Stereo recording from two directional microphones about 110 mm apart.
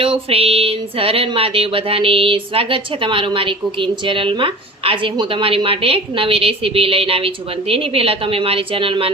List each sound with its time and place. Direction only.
0.0 s speech: 60° right (ahead or behind)